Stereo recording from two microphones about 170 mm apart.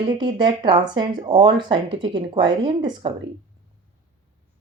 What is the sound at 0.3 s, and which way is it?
A woman's voice, 30° right (ahead or behind).